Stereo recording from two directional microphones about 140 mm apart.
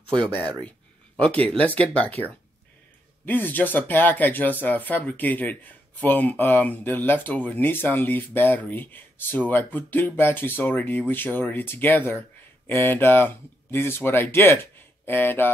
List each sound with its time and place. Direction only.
0.1 s speech: 35° right (ahead or behind)
0.7 s speech: 10° left (ahead or behind)
3.3 s speech: 15° left (ahead or behind)